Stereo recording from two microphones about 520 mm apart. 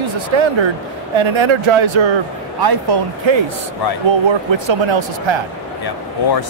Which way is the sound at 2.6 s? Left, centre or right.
Right.